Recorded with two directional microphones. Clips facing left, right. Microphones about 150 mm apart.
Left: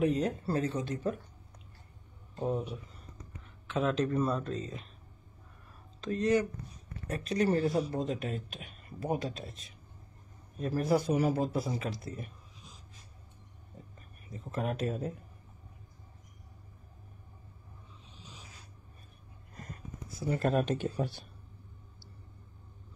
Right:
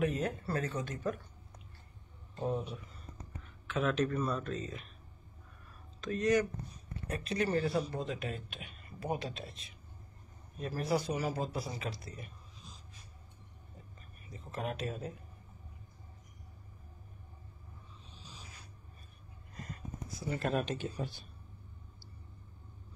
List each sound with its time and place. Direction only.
0.0 s speech: 30° left (ahead or behind)
2.3 s speech: 10° left (ahead or behind)
3.6 s speech: 30° left (ahead or behind)
5.9 s speech: 30° left (ahead or behind)
7.1 s a man's voice: 40° left (ahead or behind)
14.3 s a man's voice: 45° left (ahead or behind)
20.2 s a man's voice: 40° left (ahead or behind)